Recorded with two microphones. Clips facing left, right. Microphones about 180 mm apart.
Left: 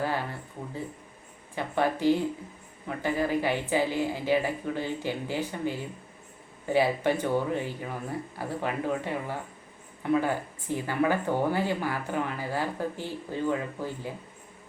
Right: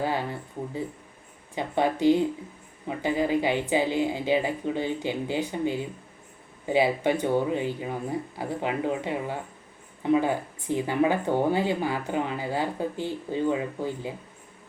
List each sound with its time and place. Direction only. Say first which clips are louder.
1.5 s a woman's voice: right 2 dB; 20° right (ahead or behind)